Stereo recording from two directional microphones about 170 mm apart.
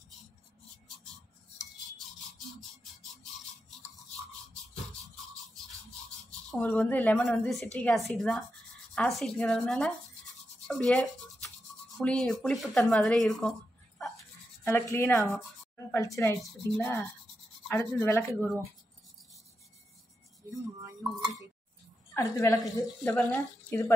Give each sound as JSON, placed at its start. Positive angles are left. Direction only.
{"t": 6.5, "sound": "a woman's voice", "side_deg": 10}
{"t": 10.7, "sound": "toothbrush", "side_deg": 5}
{"t": 12.0, "sound": "speech", "side_deg": 5}
{"t": 14.6, "sound": "speech", "side_deg": 15}
{"t": 20.8, "sound": "a sound", "side_deg": -20}
{"t": 22.1, "sound": "speech", "side_deg": 15}